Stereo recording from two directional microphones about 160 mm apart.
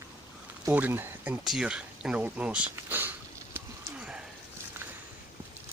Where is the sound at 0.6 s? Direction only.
15° right (ahead or behind).